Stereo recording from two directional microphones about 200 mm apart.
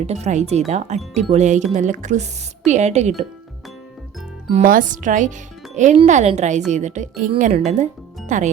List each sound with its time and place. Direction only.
0.0 s a woman's voice: 35° right (ahead or behind)
4.6 s a woman's voice: 45° right (ahead or behind)